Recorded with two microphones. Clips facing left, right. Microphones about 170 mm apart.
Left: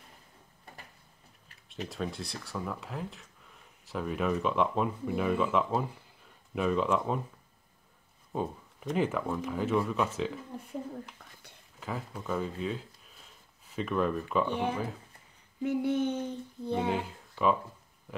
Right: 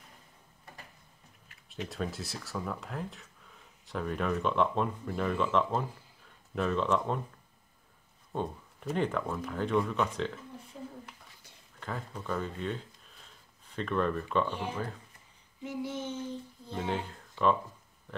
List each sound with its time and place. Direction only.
1.9 s speech: centre (ahead or behind)
8.3 s a sound: 5° left (ahead or behind)
8.9 s speech: 5° left (ahead or behind)
11.8 s speech: 5° left (ahead or behind)
14.5 s a sound: 60° left (ahead or behind)
16.9 s speech: 5° left (ahead or behind)